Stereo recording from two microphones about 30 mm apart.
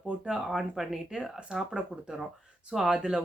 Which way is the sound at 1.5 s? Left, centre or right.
Right.